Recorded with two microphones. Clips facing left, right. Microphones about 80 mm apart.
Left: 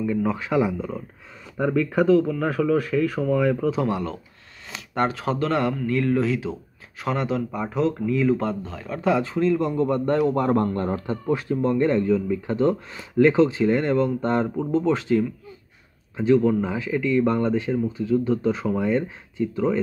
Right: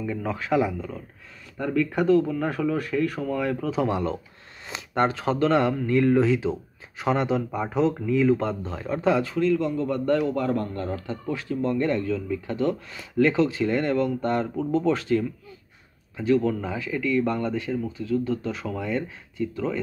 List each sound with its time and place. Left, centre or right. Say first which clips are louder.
0.2 s speech: right 1 dB; centre
8.7 s speech: right 3 dB; centre
9.8 s a man's voice: left 1 dB; left
10.6 s a man's voice: left 6 dB; left
10.9 s speech: left 5 dB; left; by 15.2 s centre
16.3 s speech: left 4 dB; centre